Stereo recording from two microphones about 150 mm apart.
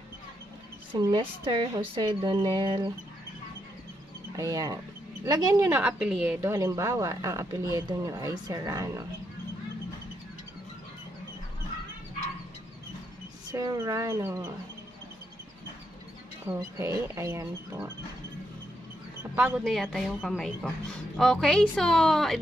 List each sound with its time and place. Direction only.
0.9 s speech: 30° right (ahead or behind)
4.4 s a woman's voice: 25° right (ahead or behind)
13.5 s a woman's voice: 20° right (ahead or behind)
16.4 s a woman's voice: 20° right (ahead or behind)
19.3 s speech: 10° right (ahead or behind)
19.6 s a woman's voice: centre (ahead or behind)